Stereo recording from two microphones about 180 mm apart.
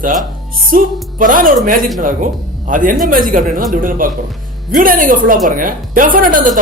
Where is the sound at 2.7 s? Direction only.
45° right (ahead or behind).